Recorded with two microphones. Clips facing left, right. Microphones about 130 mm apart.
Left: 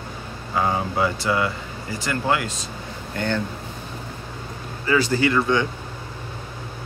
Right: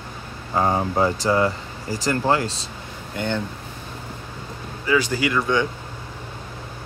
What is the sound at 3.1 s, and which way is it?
Speech, 15° right (ahead or behind).